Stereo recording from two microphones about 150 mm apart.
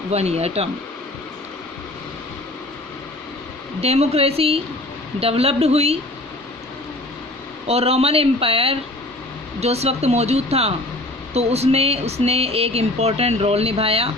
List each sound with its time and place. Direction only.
0.1 s speech: 45° right (ahead or behind)
3.8 s speech: 45° right (ahead or behind)
7.7 s speech: 40° right (ahead or behind)